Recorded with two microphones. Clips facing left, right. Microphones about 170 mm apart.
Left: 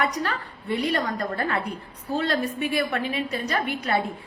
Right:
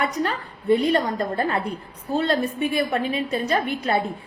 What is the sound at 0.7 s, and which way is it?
A woman's voice, 30° right (ahead or behind).